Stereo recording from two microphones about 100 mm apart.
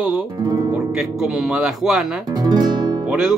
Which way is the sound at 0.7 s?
5° right (ahead or behind).